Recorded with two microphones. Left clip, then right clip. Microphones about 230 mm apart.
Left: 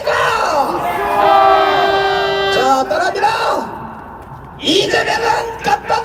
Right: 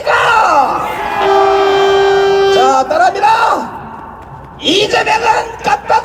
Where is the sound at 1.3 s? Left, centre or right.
Right.